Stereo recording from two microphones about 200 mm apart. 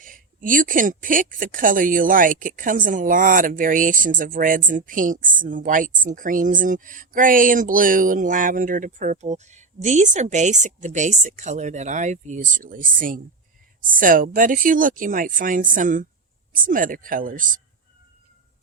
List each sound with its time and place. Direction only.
0.0 s speech: 40° right (ahead or behind)